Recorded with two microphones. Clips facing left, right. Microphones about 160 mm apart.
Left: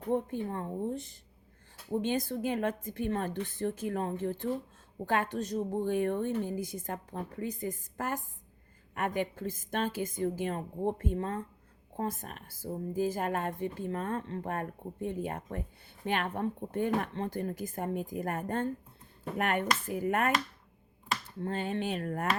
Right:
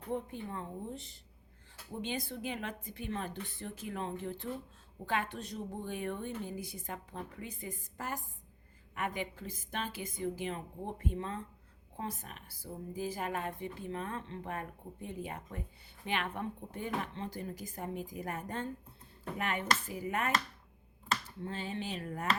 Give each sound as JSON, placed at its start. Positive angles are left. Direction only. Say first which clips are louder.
{"t": 0.1, "sound": "a woman's voice", "louder": "left 7 dB", "side_deg": 45}
{"t": 21.4, "sound": "speech", "louder": "left 6 dB", "side_deg": 55}